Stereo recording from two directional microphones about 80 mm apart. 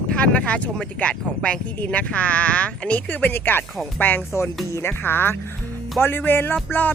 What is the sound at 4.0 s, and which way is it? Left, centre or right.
Music, left.